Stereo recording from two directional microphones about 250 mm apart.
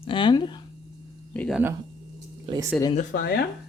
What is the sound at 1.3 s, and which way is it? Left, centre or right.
Speech, centre.